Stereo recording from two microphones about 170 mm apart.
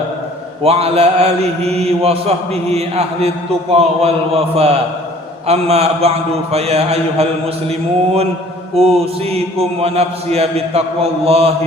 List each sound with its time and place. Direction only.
0.6 s mantra: 35° right (ahead or behind)